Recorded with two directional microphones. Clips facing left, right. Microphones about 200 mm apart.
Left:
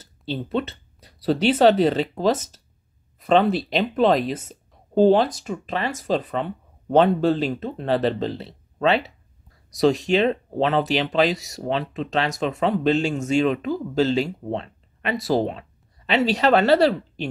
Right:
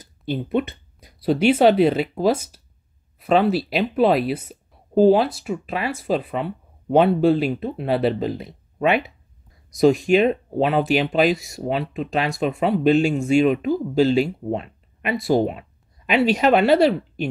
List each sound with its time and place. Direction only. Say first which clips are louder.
0.0 s speech: right 3 dB; 15° right (ahead or behind)
11.3 s speech: right 1 dB; 40° left (ahead or behind)
11.6 s speech: even; 10° right (ahead or behind)
16.3 s speech: even; 10° right (ahead or behind)